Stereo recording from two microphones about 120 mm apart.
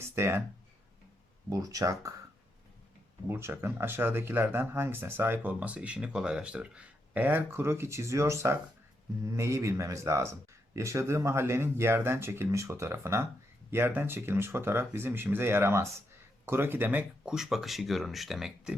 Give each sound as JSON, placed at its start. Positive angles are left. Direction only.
{"t": 0.0, "sound": "speech", "side_deg": -20}
{"t": 1.5, "sound": "speech", "side_deg": -30}
{"t": 3.2, "sound": "speech", "side_deg": -20}